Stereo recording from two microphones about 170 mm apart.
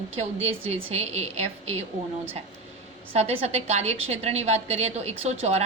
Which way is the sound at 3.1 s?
40° right (ahead or behind).